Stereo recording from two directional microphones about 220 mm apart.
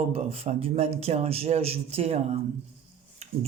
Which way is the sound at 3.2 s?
30° right (ahead or behind).